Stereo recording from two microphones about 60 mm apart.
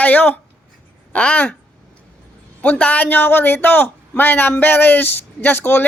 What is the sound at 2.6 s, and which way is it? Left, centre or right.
A man's voice, left.